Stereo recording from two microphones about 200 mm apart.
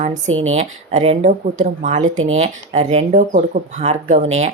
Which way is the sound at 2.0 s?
85° right.